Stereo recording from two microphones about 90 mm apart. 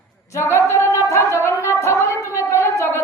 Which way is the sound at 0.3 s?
30° left (ahead or behind).